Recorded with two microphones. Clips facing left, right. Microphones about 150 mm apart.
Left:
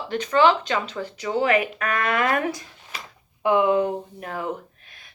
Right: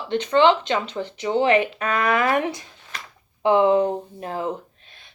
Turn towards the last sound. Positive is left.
turn(degrees=-25)  # may be behind; listen again after turning